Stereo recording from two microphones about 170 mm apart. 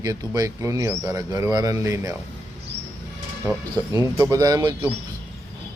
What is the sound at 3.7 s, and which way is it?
Speech, 20° right (ahead or behind).